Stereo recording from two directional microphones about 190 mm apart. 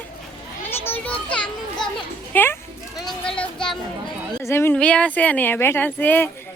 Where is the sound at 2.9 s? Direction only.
Centre (ahead or behind).